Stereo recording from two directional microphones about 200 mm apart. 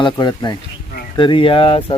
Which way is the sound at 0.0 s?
20° left (ahead or behind).